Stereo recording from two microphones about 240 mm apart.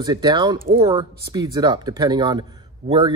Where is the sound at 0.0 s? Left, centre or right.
Centre.